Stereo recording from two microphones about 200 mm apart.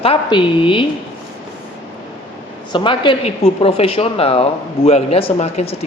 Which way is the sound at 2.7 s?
25° left (ahead or behind).